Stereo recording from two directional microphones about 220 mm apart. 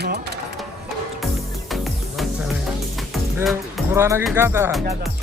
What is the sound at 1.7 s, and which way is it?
Music, centre (ahead or behind).